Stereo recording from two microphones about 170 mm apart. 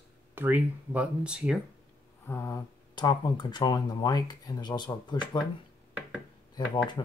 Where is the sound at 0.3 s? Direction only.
10° right (ahead or behind).